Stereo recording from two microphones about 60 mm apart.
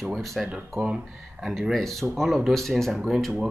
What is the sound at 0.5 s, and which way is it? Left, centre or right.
Speech, right.